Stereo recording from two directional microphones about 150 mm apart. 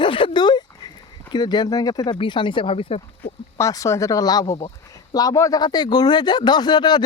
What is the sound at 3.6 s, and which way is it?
Speech, 20° left (ahead or behind).